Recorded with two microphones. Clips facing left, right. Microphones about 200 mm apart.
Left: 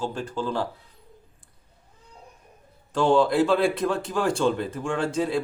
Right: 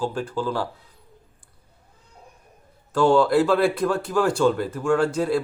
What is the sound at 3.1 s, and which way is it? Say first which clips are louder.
Speech: right 2 dB; centre (ahead or behind).